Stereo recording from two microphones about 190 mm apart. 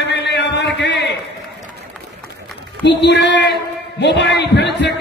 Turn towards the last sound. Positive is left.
turn(degrees=65)  # may be behind; listen again after turning